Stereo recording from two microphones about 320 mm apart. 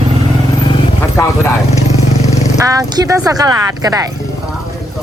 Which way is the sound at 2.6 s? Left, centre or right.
Centre.